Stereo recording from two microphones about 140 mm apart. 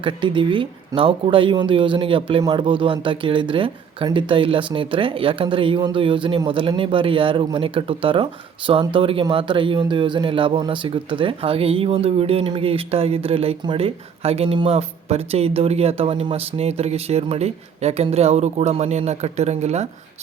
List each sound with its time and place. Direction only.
0.0 s speech: 35° right (ahead or behind); by 19.9 s 50° right (ahead or behind)